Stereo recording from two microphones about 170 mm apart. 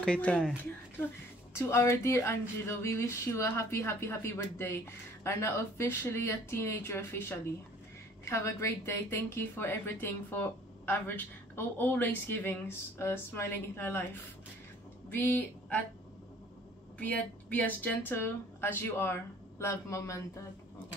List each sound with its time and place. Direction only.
0.0 s speech: 5° left (ahead or behind)
1.5 s a woman's voice: 15° left (ahead or behind)
17.0 s a woman's voice: 10° left (ahead or behind)